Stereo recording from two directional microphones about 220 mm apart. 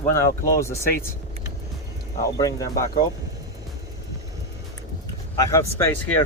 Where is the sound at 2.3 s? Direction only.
15° left (ahead or behind).